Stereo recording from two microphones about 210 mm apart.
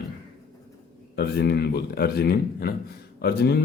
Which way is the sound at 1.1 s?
50° left (ahead or behind).